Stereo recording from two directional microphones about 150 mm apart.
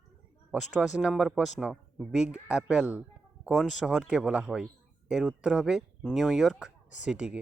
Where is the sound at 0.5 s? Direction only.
5° right (ahead or behind).